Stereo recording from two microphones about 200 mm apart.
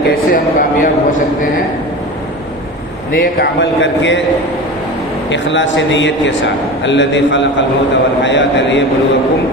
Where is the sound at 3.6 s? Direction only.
65° left (ahead or behind).